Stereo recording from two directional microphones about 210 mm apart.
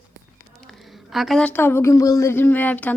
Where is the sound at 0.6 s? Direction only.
Centre (ahead or behind).